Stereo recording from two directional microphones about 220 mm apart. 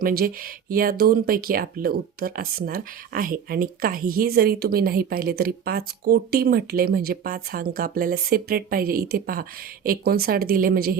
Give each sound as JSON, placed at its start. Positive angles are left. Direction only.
{"t": 0.0, "sound": "speech", "side_deg": -40}